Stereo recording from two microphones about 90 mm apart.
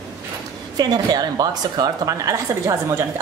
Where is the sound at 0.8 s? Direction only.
50° right (ahead or behind).